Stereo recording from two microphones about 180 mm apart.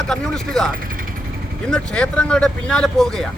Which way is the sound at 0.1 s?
5° left (ahead or behind).